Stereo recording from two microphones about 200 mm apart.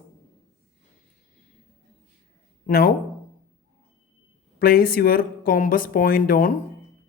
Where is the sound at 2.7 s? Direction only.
50° left (ahead or behind).